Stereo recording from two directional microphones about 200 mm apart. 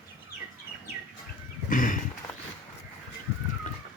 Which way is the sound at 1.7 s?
40° left (ahead or behind).